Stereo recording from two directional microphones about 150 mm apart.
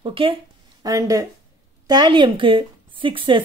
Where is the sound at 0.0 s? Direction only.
35° right (ahead or behind).